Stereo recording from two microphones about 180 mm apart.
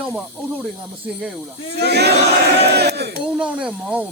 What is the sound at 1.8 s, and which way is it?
Speech, 65° right (ahead or behind).